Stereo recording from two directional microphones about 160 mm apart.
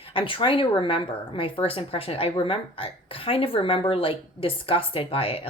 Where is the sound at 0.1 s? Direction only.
35° left (ahead or behind).